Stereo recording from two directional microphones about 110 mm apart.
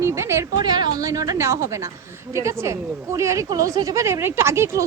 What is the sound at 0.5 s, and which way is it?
A woman's voice, 45° right (ahead or behind).